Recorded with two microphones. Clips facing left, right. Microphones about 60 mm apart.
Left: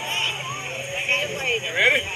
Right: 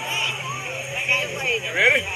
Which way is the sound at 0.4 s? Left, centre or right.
Centre.